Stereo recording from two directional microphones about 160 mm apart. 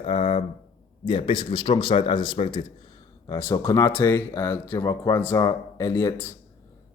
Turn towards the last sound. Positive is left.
turn(degrees=15)  # may be behind; listen again after turning